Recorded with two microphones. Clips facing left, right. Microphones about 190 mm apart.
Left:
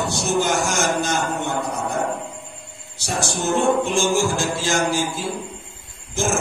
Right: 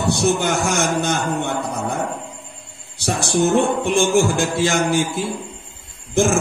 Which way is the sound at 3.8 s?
60° right (ahead or behind).